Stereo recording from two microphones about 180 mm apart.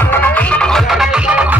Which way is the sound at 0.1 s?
10° left (ahead or behind).